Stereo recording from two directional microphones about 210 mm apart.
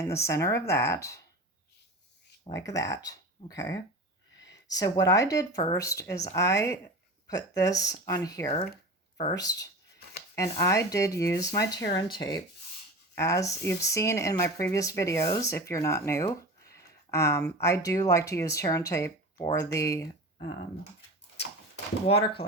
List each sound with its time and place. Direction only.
0.0 s speech: 15° left (ahead or behind)
2.4 s speech: 15° left (ahead or behind)
22.0 s speech: 30° left (ahead or behind)